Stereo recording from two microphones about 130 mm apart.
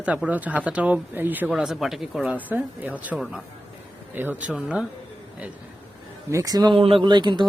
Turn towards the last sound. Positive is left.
turn(degrees=-35)  # may be behind; listen again after turning